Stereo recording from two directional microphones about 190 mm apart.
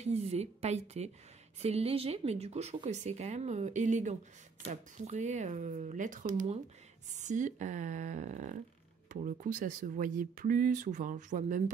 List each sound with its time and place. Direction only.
0.0 s a woman's voice: 35° right (ahead or behind)